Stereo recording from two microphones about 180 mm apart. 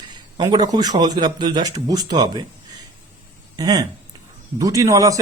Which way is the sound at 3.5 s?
20° right (ahead or behind).